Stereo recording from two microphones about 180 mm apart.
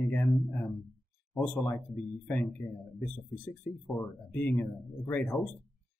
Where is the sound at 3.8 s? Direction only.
10° left (ahead or behind).